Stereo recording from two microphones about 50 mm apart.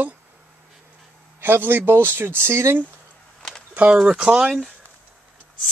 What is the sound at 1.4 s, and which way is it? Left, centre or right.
Speech, right.